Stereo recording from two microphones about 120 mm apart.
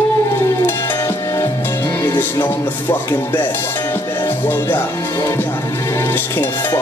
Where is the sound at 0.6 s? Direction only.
20° left (ahead or behind).